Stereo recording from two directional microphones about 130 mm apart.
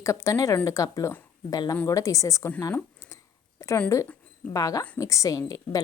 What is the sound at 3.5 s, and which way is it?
A woman's voice, 20° left (ahead or behind).